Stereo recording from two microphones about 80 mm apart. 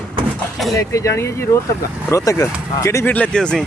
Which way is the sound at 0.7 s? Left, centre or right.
Left.